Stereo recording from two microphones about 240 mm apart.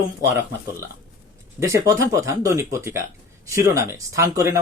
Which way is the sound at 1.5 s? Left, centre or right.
Centre.